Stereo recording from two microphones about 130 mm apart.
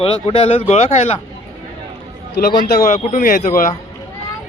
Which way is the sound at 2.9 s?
80° left.